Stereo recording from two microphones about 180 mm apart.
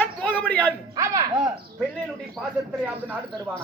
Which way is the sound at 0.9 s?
15° right (ahead or behind).